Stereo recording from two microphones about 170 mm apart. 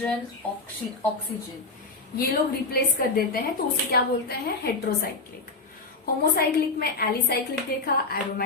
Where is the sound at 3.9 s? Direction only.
65° left (ahead or behind).